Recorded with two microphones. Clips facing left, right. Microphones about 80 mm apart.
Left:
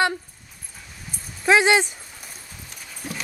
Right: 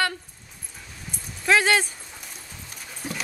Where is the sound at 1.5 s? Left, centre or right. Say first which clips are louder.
Left 3 dB; centre.